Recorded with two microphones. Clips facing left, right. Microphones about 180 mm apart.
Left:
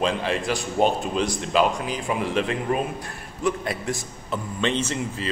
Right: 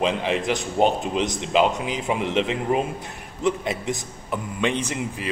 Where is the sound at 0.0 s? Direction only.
20° right (ahead or behind).